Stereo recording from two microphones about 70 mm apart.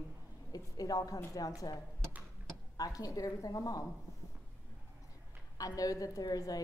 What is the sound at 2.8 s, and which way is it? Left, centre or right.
A woman's voice, left.